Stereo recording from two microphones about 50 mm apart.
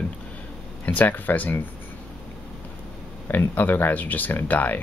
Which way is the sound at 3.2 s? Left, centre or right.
Left.